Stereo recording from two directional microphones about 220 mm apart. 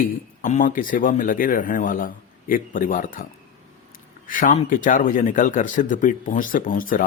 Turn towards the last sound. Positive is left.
turn(degrees=40)  # may be behind; listen again after turning